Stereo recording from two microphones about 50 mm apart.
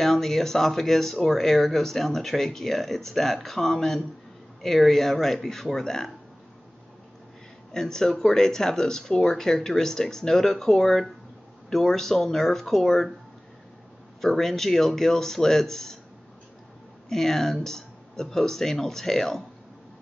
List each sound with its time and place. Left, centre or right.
0.0 s speech: centre
7.7 s speech: centre
14.2 s speech: centre
17.1 s speech: centre